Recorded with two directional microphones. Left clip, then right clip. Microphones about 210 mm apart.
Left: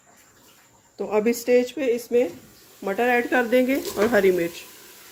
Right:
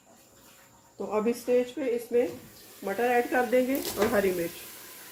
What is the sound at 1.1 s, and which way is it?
Speech, 45° left (ahead or behind).